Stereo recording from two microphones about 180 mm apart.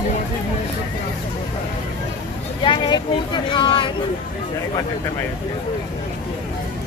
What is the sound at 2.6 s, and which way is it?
Speech, 25° left (ahead or behind).